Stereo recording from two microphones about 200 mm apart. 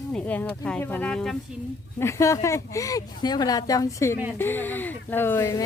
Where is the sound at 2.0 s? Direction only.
15° left (ahead or behind).